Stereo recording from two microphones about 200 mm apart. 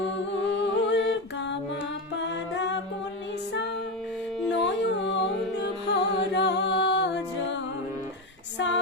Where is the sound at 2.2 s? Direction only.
65° left (ahead or behind).